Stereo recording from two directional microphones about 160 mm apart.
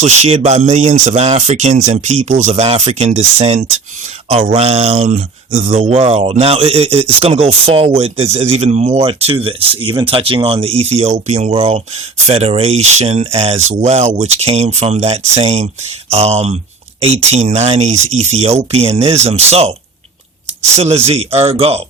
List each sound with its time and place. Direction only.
0.0 s speech: 40° right (ahead or behind)